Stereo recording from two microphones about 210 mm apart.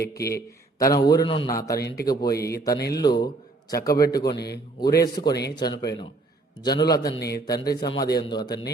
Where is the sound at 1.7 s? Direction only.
50° left (ahead or behind).